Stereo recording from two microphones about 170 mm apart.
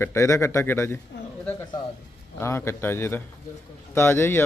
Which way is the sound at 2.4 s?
15° left (ahead or behind).